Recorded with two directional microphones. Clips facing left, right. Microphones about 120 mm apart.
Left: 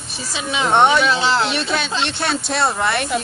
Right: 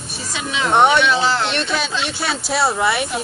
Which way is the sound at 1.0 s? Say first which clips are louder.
Even; 35° left (ahead or behind).